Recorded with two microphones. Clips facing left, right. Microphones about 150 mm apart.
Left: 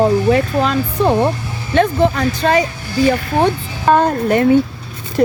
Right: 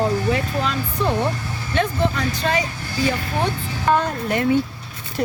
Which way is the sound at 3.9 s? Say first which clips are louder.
Left 7 dB; 50° left (ahead or behind).